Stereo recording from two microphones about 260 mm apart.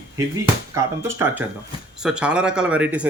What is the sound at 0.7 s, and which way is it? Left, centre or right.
Speech, centre.